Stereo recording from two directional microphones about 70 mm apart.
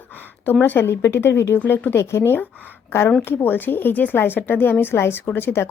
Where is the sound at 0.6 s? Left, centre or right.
Left.